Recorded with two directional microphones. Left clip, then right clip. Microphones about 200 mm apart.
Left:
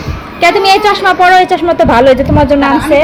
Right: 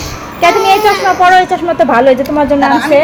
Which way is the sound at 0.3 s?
10° left (ahead or behind).